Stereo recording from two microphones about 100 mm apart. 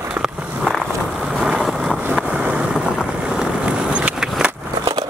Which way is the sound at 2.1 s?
10° right (ahead or behind).